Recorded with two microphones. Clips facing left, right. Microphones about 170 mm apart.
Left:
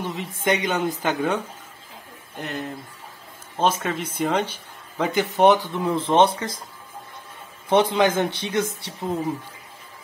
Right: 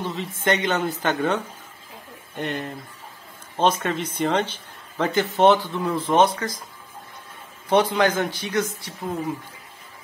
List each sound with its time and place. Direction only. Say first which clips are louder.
0.0 s speech: even; 15° left (ahead or behind)
7.7 s a man's voice: left 1 dB; 25° left (ahead or behind)